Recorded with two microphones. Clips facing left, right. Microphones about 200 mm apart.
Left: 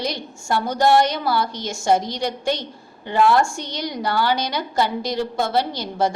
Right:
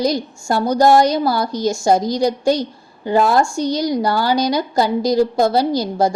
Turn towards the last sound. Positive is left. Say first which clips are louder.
# right 6 dB
turn(degrees=-40)  # may be behind; listen again after turning